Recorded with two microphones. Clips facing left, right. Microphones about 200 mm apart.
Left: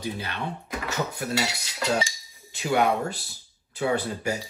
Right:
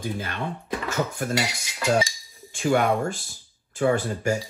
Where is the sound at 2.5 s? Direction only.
45° right (ahead or behind).